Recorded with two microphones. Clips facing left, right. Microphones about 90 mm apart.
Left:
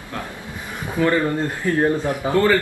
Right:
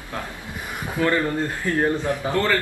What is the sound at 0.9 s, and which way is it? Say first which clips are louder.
Speech: left 3 dB; 15° left (ahead or behind).